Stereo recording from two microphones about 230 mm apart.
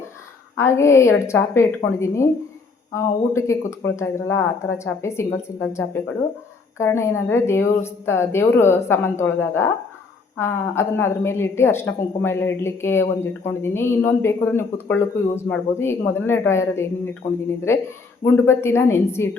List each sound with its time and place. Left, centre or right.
0.5 s a woman's voice: centre